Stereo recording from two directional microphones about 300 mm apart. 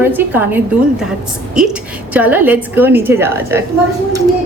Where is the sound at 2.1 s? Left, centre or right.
Centre.